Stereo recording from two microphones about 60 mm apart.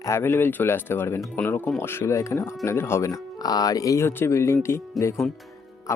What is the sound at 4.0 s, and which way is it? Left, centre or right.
Speech, left.